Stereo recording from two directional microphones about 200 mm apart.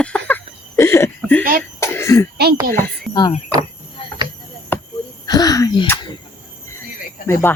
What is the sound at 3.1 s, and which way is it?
Speech, 20° left (ahead or behind).